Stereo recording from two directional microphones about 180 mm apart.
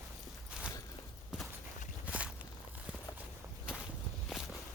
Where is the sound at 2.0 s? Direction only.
5° right (ahead or behind).